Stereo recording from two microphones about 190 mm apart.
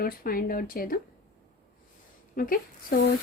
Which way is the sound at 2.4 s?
50° left (ahead or behind).